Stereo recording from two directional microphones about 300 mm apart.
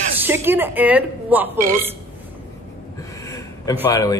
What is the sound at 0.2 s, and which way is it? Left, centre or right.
A woman's voice, centre.